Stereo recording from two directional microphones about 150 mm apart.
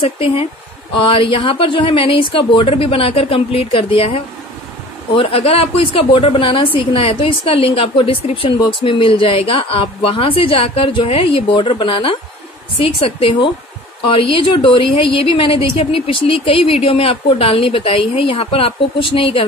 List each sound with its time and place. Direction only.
0.0 s a woman's voice: 40° left (ahead or behind)